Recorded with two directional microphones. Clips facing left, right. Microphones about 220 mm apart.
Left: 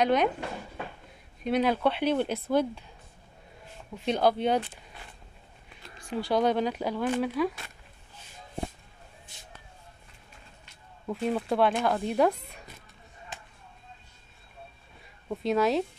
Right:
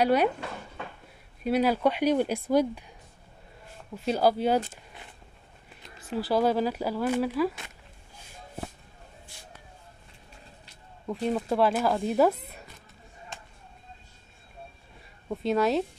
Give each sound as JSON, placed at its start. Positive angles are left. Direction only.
{"t": 0.0, "sound": "speech", "side_deg": -10}
{"t": 1.4, "sound": "speech", "side_deg": -5}
{"t": 3.9, "sound": "speech", "side_deg": -5}
{"t": 5.9, "sound": "speech", "side_deg": -5}
{"t": 9.3, "sound": "vehicle", "side_deg": 20}
{"t": 11.1, "sound": "speech", "side_deg": 0}
{"t": 13.3, "sound": "a sound", "side_deg": 5}
{"t": 15.2, "sound": "speech", "side_deg": 0}